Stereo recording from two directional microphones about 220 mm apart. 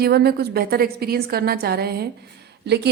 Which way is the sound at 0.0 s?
45° right (ahead or behind).